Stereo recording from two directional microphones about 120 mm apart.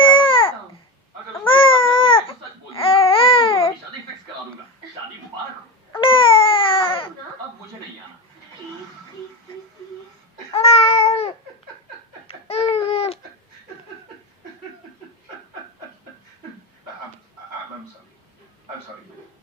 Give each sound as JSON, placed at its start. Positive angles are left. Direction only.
{"t": 0.0, "sound": "babbling", "side_deg": 45}
{"t": 1.5, "sound": "baby cry", "side_deg": 45}
{"t": 2.7, "sound": "babbling", "side_deg": 50}
{"t": 6.0, "sound": "baby cry", "side_deg": 45}
{"t": 10.5, "sound": "babbling", "side_deg": 60}
{"t": 12.3, "sound": "babbling", "side_deg": 55}